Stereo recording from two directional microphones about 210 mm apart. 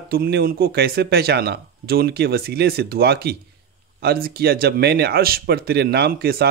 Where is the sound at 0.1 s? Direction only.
45° right (ahead or behind).